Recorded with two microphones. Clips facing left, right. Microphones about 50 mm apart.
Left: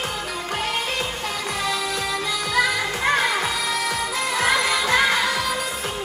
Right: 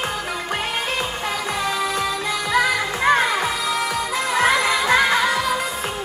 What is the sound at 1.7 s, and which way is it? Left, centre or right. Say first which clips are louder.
Music: right 3 dB; right.